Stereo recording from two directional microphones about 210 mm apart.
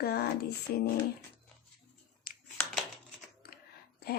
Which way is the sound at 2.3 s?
45° left (ahead or behind).